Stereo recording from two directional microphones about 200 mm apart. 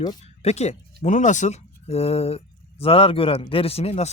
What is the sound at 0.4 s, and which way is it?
Speech, 35° left (ahead or behind).